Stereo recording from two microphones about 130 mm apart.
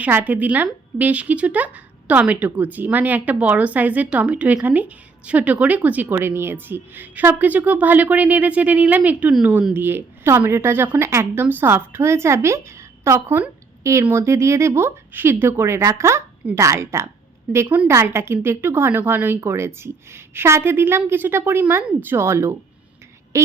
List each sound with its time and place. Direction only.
0.0 s a woman's voice: 15° right (ahead or behind)